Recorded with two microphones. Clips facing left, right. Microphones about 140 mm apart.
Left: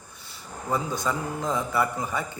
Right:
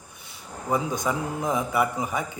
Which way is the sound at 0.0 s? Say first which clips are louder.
Even; 15° right (ahead or behind).